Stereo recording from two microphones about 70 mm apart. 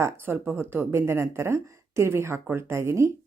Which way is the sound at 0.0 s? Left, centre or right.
Right.